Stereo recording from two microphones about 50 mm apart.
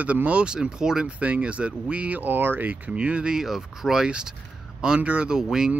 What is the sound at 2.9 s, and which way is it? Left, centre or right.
Speech, right.